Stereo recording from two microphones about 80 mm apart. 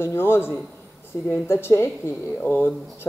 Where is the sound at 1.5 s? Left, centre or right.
Left.